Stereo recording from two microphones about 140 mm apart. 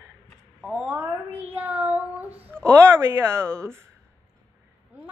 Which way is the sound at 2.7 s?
20° right (ahead or behind).